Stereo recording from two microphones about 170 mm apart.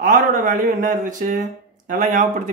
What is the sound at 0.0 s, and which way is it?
Speech, 55° right (ahead or behind).